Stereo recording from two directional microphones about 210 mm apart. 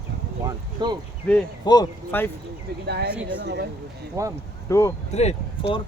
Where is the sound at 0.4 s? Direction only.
20° right (ahead or behind).